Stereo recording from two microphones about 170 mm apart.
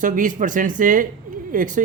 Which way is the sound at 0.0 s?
50° right (ahead or behind).